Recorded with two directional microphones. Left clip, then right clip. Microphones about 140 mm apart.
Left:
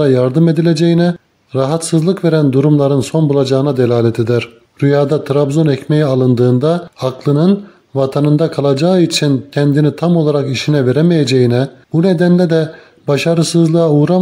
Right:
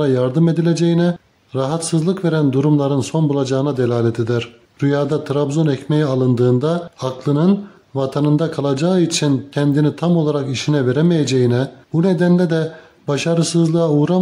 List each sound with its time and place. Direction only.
0.0 s speech: 30° left (ahead or behind)